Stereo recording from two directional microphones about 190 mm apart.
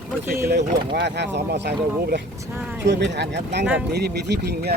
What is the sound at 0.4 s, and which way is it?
Speech, 60° right (ahead or behind).